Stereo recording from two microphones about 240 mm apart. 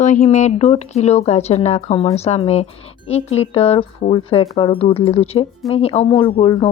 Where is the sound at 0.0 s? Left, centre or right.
Left.